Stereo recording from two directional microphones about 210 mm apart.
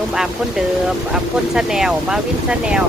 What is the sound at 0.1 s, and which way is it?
Speech, centre (ahead or behind).